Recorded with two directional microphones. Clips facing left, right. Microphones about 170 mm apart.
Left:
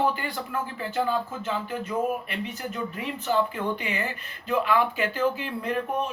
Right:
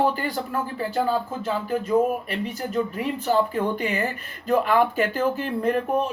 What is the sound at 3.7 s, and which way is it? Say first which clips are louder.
Speech: right 5 dB; 40° right (ahead or behind).